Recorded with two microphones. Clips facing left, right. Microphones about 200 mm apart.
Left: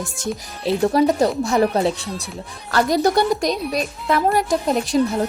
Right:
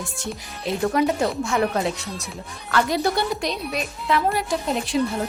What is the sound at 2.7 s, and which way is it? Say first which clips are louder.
Speech: left 5 dB; 40° left (ahead or behind).